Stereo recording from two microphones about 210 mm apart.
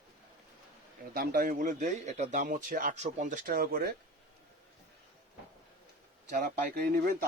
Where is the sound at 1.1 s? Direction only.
45° right (ahead or behind).